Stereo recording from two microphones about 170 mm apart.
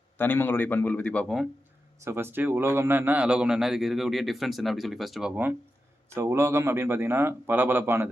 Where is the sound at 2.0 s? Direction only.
15° right (ahead or behind).